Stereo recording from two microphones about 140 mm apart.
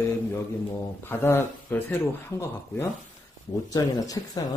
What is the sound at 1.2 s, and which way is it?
A man's voice, 15° left (ahead or behind).